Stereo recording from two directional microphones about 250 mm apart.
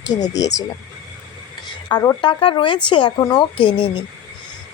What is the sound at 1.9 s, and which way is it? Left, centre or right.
A woman's voice, centre.